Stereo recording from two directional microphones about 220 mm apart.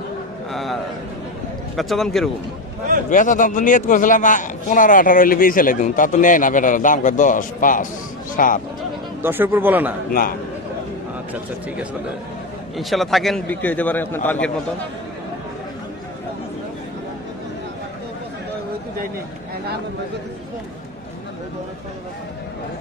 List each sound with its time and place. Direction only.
0.5 s a sound: centre (ahead or behind)
1.8 s speech: centre (ahead or behind)
3.1 s a man's voice: 35° left (ahead or behind)
9.2 s speech: 10° right (ahead or behind)
12.7 s a man's voice: centre (ahead or behind)